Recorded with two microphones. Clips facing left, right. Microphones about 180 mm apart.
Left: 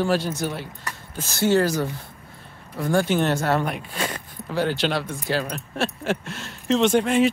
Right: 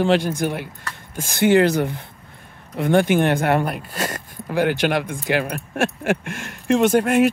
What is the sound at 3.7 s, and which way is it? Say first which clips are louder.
Speech: right 2 dB; 5° right (ahead or behind).